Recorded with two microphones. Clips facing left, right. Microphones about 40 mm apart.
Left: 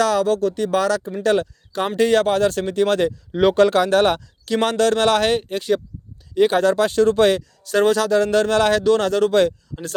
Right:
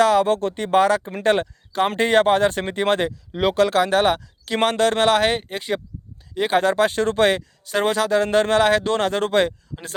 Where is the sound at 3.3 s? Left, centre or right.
Centre.